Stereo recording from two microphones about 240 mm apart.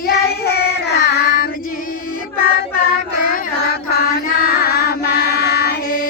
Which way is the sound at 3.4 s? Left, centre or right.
Left.